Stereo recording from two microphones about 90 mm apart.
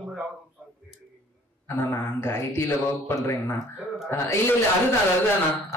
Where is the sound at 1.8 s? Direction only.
25° left (ahead or behind).